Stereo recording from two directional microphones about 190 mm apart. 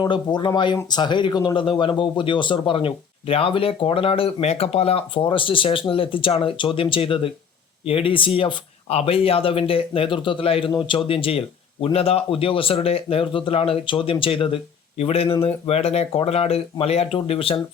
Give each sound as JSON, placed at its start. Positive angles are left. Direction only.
{"t": 0.0, "sound": "speech", "side_deg": 25}